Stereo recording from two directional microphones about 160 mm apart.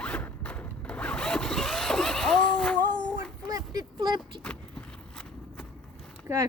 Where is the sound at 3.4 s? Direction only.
25° right (ahead or behind).